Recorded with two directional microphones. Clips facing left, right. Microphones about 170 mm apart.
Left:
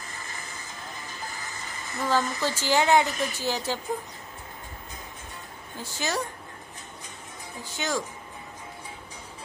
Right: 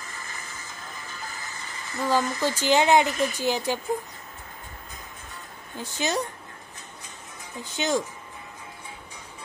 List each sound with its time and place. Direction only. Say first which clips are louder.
2.0 s speech: right 2 dB; 15° right (ahead or behind)
5.8 s speech: right 3 dB; 20° right (ahead or behind)
7.6 s speech: right 4 dB; 20° right (ahead or behind)